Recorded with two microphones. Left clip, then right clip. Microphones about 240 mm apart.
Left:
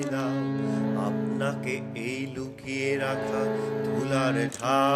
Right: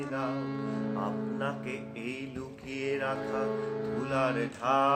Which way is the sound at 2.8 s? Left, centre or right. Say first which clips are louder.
Left 4 dB; left.